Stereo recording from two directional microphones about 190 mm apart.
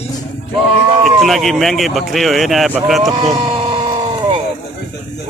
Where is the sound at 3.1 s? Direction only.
20° right (ahead or behind).